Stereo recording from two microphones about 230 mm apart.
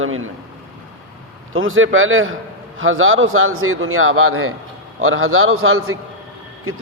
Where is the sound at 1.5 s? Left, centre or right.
Right.